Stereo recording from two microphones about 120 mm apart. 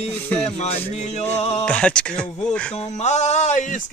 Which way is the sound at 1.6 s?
10° left (ahead or behind).